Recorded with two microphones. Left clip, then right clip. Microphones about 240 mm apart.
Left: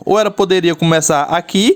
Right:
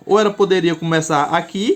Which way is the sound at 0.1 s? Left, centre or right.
Left.